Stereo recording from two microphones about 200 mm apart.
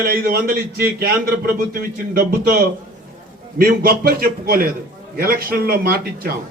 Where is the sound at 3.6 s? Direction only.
45° right (ahead or behind).